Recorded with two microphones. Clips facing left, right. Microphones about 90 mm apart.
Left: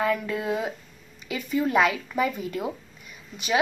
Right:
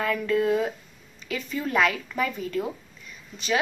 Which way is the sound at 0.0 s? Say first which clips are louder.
Right 2 dB; 10° left (ahead or behind).